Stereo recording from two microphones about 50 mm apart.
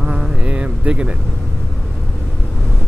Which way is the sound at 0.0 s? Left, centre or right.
Centre.